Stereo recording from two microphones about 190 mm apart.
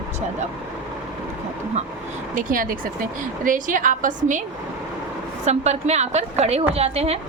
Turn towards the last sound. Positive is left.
turn(degrees=-35)  # may be behind; listen again after turning